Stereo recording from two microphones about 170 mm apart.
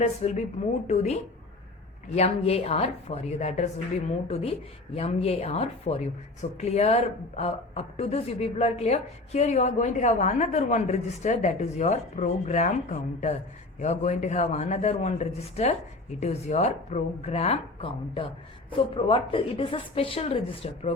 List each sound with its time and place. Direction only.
0.0 s a woman's voice: 40° left (ahead or behind)